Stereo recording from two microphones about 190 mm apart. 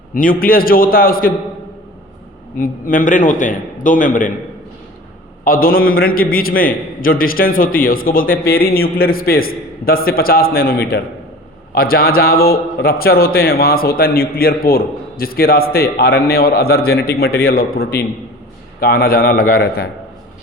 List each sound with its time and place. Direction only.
0.1 s a man's voice: 45° left (ahead or behind)
2.6 s a man's voice: 45° left (ahead or behind)
5.5 s a man's voice: 50° left (ahead or behind)